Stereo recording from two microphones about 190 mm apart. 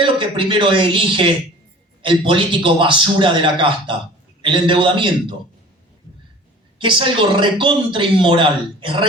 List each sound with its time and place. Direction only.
0.0 s a man's voice: 25° right (ahead or behind)
6.7 s a man's voice: 25° right (ahead or behind)